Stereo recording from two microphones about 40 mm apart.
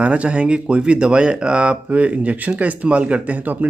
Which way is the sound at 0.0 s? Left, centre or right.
Right.